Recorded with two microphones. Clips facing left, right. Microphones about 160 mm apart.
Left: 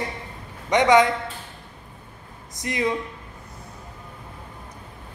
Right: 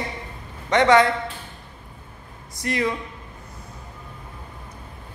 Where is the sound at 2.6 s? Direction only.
20° left (ahead or behind).